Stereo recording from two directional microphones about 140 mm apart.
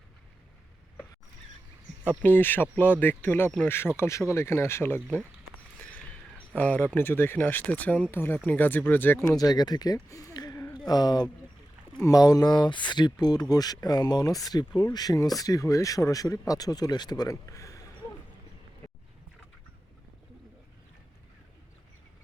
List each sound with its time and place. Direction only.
2.0 s speech: 15° left (ahead or behind)
5.8 s a sound: 10° left (ahead or behind)
6.6 s speech: 10° left (ahead or behind)
9.4 s speech: 30° left (ahead or behind)